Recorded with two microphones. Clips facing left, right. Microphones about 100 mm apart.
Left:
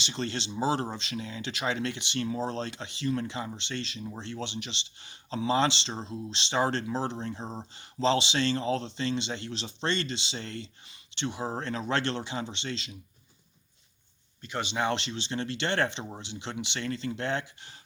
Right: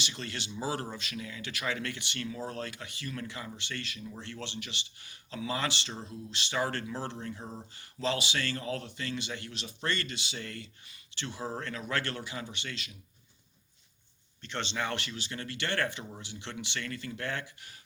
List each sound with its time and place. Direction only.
0.0 s speech: 30° left (ahead or behind)
14.4 s speech: 10° left (ahead or behind)